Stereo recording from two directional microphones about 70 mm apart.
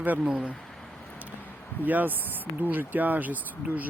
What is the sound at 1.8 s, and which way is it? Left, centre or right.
Speech, right.